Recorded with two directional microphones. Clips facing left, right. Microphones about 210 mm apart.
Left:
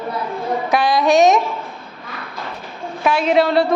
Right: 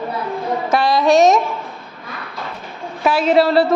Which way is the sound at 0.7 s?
Centre (ahead or behind).